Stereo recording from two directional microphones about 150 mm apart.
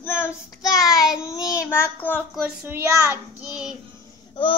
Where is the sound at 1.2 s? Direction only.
25° left (ahead or behind).